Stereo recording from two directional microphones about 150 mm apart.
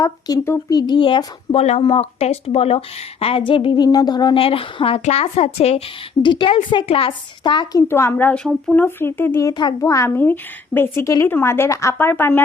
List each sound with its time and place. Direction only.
0.0 s speech: 20° left (ahead or behind)
0.8 s a woman's voice: 30° left (ahead or behind); by 12.4 s 15° left (ahead or behind)